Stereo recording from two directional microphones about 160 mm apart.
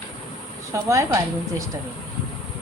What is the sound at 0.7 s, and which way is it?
Speech, 20° right (ahead or behind).